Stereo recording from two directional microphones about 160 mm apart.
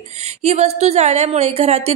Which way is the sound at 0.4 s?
40° right (ahead or behind).